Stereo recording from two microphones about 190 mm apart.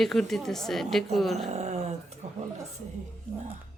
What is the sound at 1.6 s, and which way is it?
Speech, 35° right (ahead or behind).